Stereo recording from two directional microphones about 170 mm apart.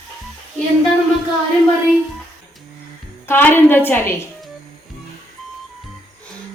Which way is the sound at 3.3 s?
10° left (ahead or behind).